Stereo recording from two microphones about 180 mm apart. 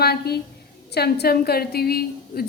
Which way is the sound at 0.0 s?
60° left (ahead or behind).